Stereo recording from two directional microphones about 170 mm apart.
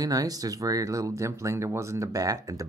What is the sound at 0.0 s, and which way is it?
Speech, 20° right (ahead or behind).